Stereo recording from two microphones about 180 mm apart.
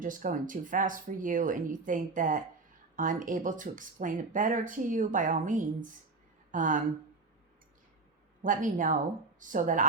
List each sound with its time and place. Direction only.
0.0 s speech: 50° right (ahead or behind)
8.4 s speech: 45° right (ahead or behind)